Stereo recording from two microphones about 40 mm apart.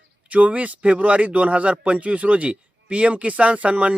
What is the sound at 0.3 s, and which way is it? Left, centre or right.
Speech, right.